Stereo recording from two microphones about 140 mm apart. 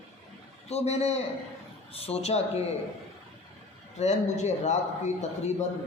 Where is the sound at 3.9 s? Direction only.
55° left (ahead or behind).